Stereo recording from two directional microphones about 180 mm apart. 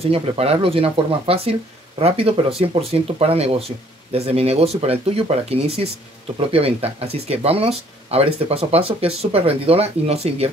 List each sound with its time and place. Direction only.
0.0 s speech: 35° right (ahead or behind)